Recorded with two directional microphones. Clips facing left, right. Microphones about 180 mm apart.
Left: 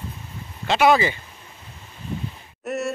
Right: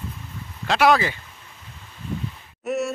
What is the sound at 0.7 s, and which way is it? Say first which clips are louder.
Speech: left 1 dB; centre (ahead or behind).